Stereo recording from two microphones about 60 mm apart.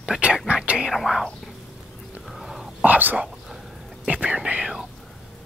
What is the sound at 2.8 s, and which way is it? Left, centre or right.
Whispering, right.